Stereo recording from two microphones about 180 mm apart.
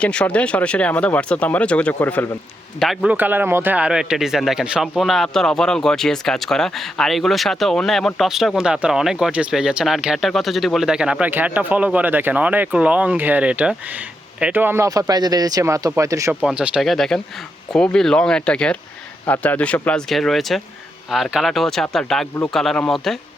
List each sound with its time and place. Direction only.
0.0 s speech: 5° left (ahead or behind)
2.8 s speech: centre (ahead or behind); by 16.3 s 15° right (ahead or behind)
16.3 s speech: 5° right (ahead or behind)